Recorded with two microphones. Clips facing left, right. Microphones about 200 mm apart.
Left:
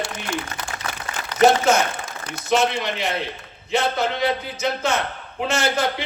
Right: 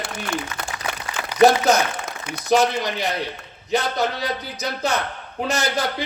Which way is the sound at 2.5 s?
35° right (ahead or behind).